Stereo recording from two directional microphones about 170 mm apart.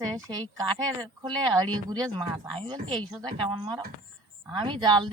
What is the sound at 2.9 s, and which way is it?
Speech, centre (ahead or behind).